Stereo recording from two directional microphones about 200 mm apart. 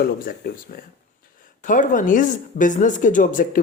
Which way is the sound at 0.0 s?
50° left (ahead or behind).